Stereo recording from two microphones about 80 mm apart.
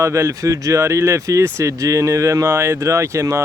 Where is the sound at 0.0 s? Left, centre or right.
Right.